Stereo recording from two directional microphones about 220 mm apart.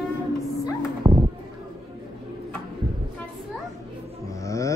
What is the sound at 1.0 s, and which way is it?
Music, 15° right (ahead or behind).